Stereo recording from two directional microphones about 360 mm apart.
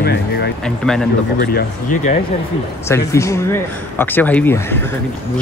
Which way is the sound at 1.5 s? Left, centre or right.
Left.